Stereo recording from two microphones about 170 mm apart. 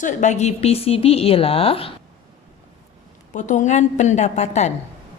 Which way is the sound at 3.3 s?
45° left (ahead or behind).